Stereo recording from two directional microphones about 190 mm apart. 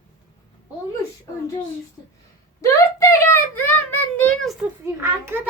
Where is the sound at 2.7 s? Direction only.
15° left (ahead or behind).